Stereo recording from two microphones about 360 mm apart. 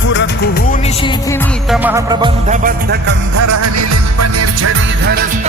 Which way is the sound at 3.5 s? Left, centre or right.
Right.